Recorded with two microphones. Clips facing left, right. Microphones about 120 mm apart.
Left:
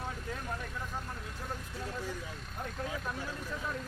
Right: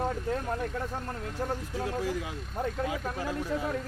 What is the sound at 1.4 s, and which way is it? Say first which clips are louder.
Speech: right 11 dB; 75° right (ahead or behind).